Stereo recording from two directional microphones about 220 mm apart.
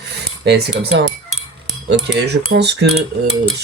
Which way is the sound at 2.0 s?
50° right (ahead or behind).